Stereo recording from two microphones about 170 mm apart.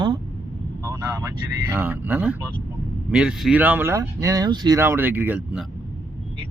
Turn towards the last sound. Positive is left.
turn(degrees=-10)  # may be behind; listen again after turning